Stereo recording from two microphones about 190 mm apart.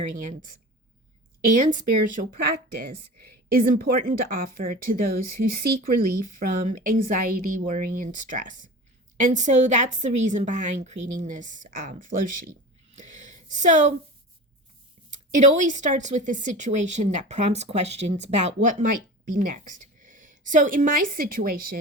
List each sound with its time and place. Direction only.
0.2 s speech: 45° right (ahead or behind)
13.0 s a sound: 40° right (ahead or behind)
15.4 s speech: 40° right (ahead or behind)